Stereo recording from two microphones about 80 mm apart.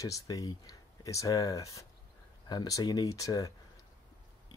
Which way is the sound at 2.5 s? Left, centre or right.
Left.